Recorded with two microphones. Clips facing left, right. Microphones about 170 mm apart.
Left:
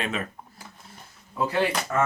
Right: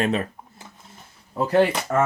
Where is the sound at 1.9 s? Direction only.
45° right (ahead or behind).